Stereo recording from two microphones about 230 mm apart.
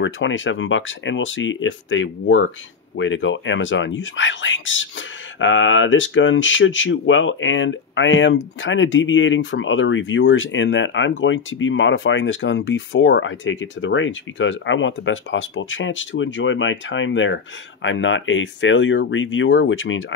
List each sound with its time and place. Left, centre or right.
0.0 s speech: left